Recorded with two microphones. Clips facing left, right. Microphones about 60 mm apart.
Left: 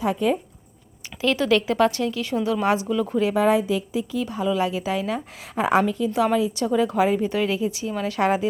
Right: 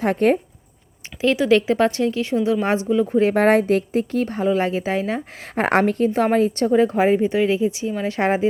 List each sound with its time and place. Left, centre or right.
0.0 s speech: right
1.2 s a woman's voice: right
3.3 s a woman's voice: right
5.5 s a woman's voice: right
6.7 s a woman's voice: right